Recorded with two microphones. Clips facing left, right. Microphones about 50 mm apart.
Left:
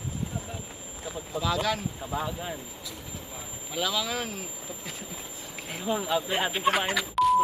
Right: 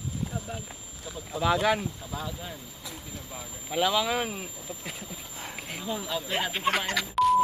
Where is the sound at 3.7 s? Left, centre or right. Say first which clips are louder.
Right 4 dB; centre.